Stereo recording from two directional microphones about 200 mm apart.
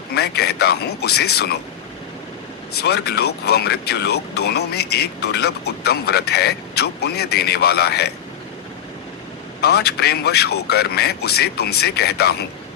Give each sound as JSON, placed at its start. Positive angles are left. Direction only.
{"t": 0.1, "sound": "speech", "side_deg": 55}
{"t": 2.7, "sound": "speech", "side_deg": 55}
{"t": 9.6, "sound": "speech", "side_deg": 55}